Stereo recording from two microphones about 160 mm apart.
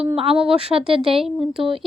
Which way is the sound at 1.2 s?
Centre (ahead or behind).